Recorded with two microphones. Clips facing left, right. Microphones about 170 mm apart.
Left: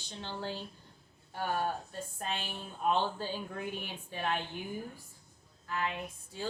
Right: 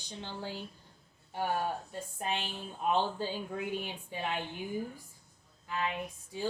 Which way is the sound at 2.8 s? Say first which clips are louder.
Even; 15° right (ahead or behind).